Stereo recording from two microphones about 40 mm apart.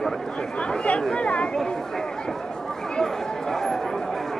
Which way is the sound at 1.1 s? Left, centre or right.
Left.